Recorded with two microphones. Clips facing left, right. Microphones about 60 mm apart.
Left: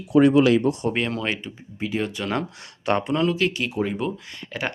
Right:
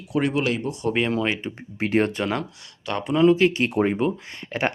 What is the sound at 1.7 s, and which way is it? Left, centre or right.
Speech, right.